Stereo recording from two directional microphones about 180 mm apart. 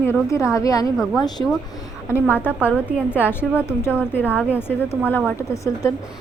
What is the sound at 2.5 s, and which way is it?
Speech, 10° right (ahead or behind).